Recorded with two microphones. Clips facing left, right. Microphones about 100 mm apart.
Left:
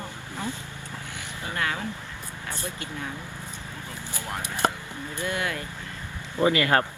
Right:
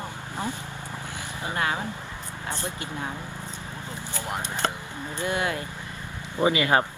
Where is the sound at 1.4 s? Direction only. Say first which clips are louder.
Right 2 dB; 20° right (ahead or behind).